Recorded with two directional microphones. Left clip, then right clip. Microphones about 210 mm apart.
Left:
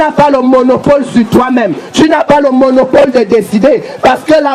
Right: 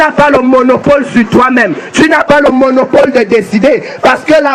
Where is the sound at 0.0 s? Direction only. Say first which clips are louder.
Right 1 dB; 25° left (ahead or behind).